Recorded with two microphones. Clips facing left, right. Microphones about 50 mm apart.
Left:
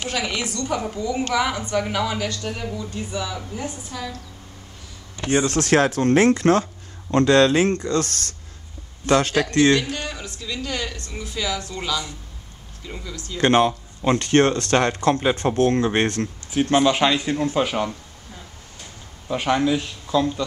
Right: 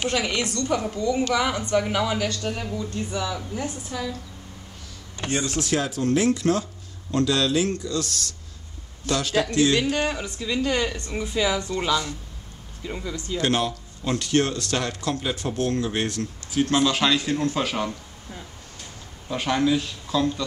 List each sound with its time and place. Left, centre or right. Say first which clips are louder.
0.1 s a woman's voice: right 1 dB; centre
5.3 s speech: left 7 dB; left
5.6 s speech: left 8 dB; left
9.8 s speech: right 3 dB; centre
12.8 s speech: right 3 dB; centre
13.4 s speech: left 7 dB; left
16.5 s speech: left 3 dB; left
19.2 s speech: left 2 dB; centre